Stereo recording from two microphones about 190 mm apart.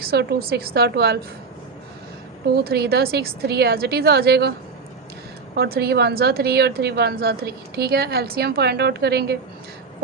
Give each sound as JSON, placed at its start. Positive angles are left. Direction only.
{"t": 0.0, "sound": "a woman's voice", "side_deg": -55}
{"t": 2.6, "sound": "a woman's voice", "side_deg": -55}
{"t": 5.5, "sound": "a woman's voice", "side_deg": -55}